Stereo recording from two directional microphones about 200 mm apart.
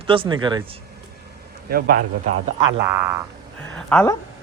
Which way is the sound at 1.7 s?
45° right (ahead or behind).